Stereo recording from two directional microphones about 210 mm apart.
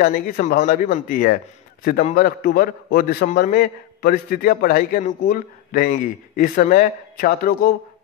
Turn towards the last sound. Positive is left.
turn(degrees=45)  # may be behind; listen again after turning